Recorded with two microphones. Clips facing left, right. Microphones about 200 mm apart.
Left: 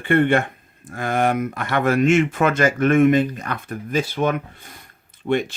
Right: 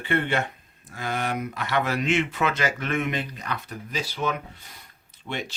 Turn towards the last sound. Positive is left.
turn(degrees=50)  # may be behind; listen again after turning